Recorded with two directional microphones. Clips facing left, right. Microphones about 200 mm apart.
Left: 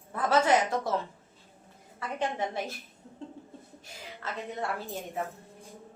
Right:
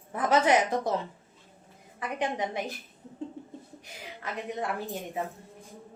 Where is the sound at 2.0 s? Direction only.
15° right (ahead or behind).